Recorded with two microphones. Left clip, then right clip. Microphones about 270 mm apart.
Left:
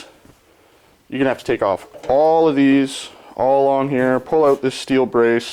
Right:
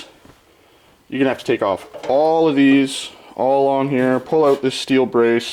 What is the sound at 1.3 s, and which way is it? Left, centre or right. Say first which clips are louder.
Speech: left 1 dB; centre.